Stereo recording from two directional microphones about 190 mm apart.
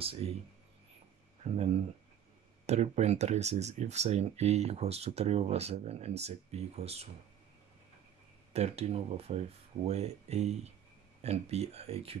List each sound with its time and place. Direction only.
0.0 s speech: 30° right (ahead or behind)
2.6 s speech: 35° right (ahead or behind)
8.5 s speech: 35° right (ahead or behind)